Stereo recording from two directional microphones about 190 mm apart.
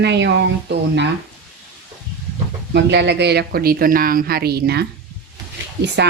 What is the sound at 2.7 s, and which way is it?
Speech, 65° right (ahead or behind).